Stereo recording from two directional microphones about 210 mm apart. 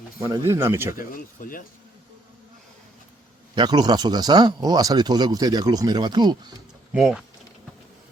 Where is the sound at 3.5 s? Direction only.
20° right (ahead or behind).